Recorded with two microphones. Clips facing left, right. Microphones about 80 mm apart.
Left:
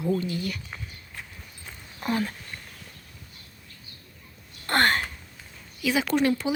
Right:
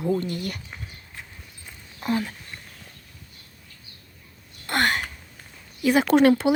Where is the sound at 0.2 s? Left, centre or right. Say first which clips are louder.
Right 1 dB; right.